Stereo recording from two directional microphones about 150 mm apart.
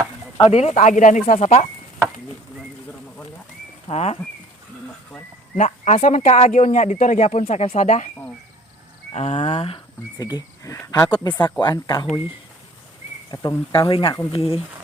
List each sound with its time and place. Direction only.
0.3 s speech: 40° left (ahead or behind)
3.8 s speech: 45° left (ahead or behind)
5.5 s speech: 55° left (ahead or behind)
9.1 s speech: 45° left (ahead or behind)
10.2 s speech: 25° left (ahead or behind)
13.3 s speech: 25° left (ahead or behind)